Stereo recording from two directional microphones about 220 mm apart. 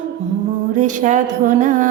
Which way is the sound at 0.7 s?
35° right (ahead or behind).